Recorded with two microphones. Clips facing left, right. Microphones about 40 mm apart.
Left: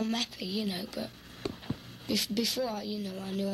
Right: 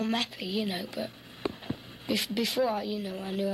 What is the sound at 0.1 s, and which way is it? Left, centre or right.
A woman's voice, centre.